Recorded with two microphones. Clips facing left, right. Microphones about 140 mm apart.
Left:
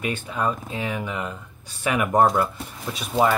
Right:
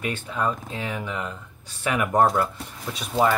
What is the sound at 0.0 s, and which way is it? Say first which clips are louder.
Speech: left 1 dB; 15° left (ahead or behind).